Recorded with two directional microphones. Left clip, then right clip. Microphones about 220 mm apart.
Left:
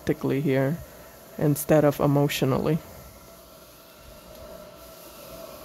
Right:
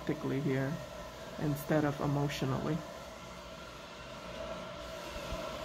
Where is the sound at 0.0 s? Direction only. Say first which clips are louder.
Left 10 dB; 55° left (ahead or behind).